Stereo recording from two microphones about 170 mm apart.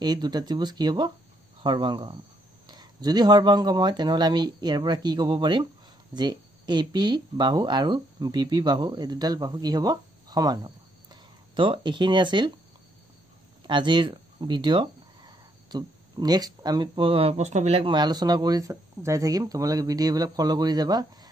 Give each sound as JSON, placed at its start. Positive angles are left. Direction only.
{"t": 0.0, "sound": "speech", "side_deg": -25}
{"t": 13.7, "sound": "speech", "side_deg": -25}